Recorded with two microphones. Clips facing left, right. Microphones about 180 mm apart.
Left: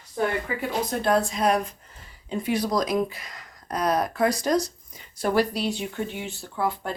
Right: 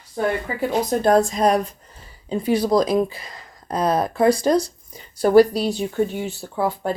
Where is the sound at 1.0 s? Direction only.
45° right (ahead or behind).